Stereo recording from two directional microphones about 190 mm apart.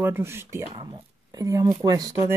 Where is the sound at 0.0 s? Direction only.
10° right (ahead or behind).